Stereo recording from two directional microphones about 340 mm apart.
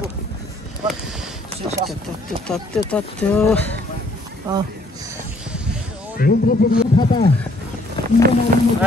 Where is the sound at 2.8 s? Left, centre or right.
Centre.